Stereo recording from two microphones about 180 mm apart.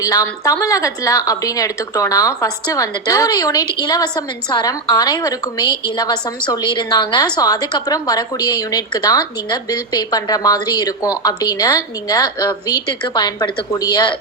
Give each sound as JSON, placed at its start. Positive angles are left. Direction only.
{"t": 0.0, "sound": "a woman's voice", "side_deg": 20}